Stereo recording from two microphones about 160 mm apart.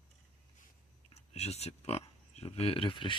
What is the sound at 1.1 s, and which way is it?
Speech, 40° left (ahead or behind).